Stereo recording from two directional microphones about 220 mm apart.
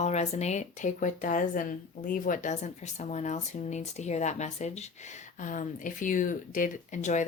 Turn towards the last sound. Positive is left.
turn(degrees=35)  # may be behind; listen again after turning